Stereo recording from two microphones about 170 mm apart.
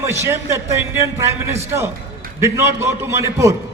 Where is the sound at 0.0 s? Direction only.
15° right (ahead or behind).